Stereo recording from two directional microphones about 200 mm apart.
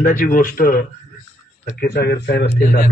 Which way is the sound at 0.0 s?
40° left (ahead or behind).